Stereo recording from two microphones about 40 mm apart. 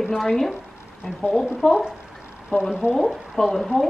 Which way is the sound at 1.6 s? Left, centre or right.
Centre.